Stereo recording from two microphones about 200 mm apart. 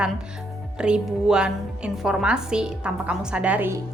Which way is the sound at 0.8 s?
5° right (ahead or behind).